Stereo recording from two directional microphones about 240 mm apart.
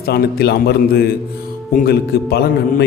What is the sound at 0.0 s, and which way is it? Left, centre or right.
A man's voice, left.